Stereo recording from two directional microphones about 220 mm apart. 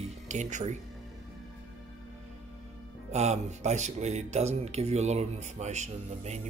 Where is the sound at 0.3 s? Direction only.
35° right (ahead or behind).